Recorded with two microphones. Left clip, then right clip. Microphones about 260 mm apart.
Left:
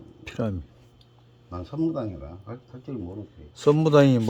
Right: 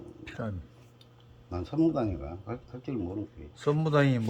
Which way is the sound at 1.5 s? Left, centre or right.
Centre.